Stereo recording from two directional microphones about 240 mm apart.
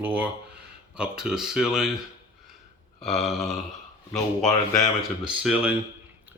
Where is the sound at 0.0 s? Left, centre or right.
Centre.